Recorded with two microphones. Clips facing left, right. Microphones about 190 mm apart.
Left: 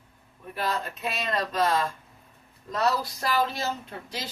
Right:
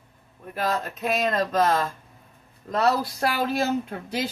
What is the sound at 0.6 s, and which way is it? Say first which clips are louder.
Speech: right 4 dB; 45° right (ahead or behind).